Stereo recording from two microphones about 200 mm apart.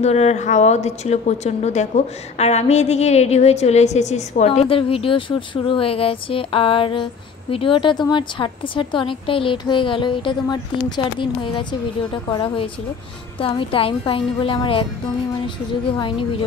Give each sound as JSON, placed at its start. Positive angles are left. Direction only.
{"t": 0.0, "sound": "a woman's voice", "side_deg": 35}